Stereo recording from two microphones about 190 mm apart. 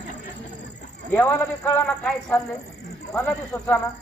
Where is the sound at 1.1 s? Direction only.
10° left (ahead or behind).